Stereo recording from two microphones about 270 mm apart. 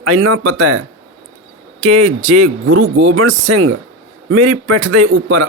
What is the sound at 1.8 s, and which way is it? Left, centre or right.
Speech, right.